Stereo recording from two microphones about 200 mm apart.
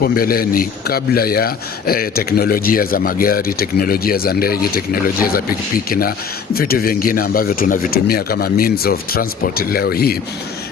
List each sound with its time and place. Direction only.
0.0 s a man's voice: 50° left (ahead or behind)